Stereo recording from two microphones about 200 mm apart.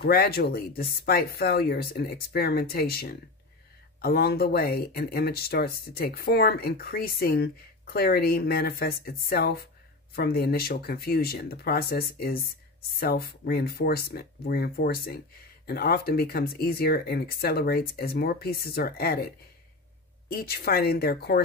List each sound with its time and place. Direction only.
0.0 s speech: 50° left (ahead or behind)
20.2 s speech: 50° left (ahead or behind)